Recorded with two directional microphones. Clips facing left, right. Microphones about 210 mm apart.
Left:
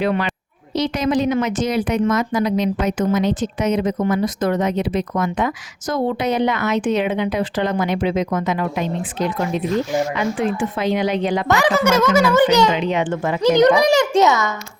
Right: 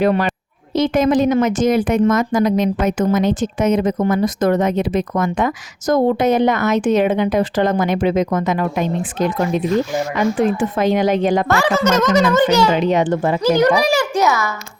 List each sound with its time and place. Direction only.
0.0 s a woman's voice: 45° right (ahead or behind)
11.4 s a child's voice: 15° left (ahead or behind)
12.7 s a child's voice: 40° right (ahead or behind)
13.4 s a child's voice: 20° left (ahead or behind)